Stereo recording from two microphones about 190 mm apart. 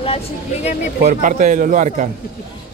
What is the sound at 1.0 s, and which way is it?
A man's voice, 40° right (ahead or behind).